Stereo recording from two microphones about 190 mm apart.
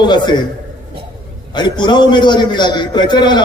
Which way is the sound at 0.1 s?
25° left (ahead or behind).